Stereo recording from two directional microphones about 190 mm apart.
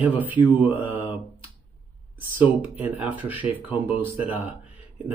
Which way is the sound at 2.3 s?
10° right (ahead or behind).